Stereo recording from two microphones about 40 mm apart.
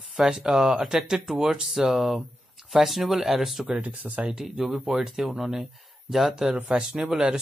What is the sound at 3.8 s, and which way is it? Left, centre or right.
Speech, right.